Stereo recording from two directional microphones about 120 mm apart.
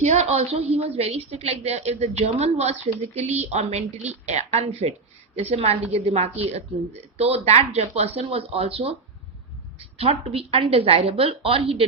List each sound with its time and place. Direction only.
0.0 s a woman's voice: 65° right (ahead or behind)